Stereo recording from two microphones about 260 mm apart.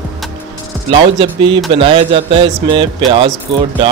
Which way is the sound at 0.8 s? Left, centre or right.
Centre.